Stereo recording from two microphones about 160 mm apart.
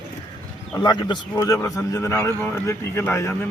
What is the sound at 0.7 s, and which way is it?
A man's voice, 25° left (ahead or behind).